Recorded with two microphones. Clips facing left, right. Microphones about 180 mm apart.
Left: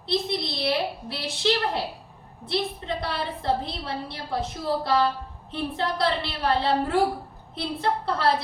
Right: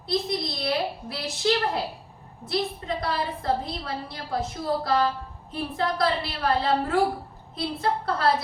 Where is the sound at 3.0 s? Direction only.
30° left (ahead or behind).